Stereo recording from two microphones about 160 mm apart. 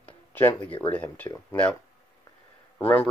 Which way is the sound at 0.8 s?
10° left (ahead or behind).